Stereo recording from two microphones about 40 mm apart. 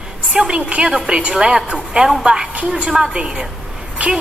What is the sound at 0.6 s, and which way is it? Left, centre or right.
A woman's voice, right.